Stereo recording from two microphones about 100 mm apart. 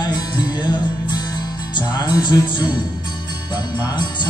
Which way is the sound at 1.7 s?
50° left (ahead or behind).